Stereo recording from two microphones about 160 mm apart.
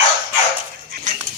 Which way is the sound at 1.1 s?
55° right (ahead or behind).